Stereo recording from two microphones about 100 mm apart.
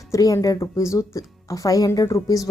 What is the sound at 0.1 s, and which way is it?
Speech, 35° left (ahead or behind).